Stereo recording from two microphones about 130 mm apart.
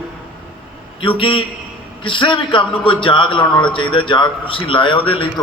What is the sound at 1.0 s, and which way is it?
A man's voice, 40° left (ahead or behind).